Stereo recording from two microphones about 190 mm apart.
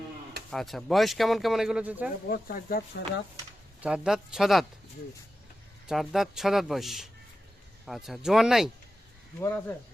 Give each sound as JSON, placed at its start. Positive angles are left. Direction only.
{"t": 0.5, "sound": "speech", "side_deg": 0}
{"t": 2.3, "sound": "speech", "side_deg": 50}
{"t": 3.8, "sound": "speech", "side_deg": -5}
{"t": 5.9, "sound": "speech", "side_deg": 0}
{"t": 9.4, "sound": "speech", "side_deg": 15}